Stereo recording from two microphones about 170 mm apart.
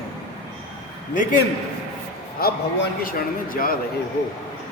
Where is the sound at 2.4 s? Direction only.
60° left (ahead or behind).